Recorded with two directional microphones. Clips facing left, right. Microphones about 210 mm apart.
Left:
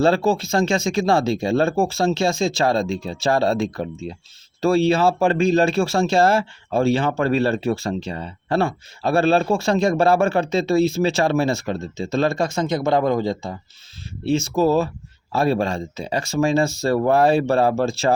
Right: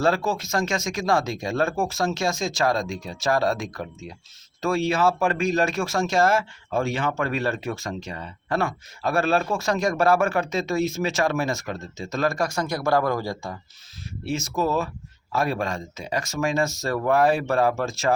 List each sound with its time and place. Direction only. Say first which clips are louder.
0.0 s speech: left 5 dB; 30° left (ahead or behind)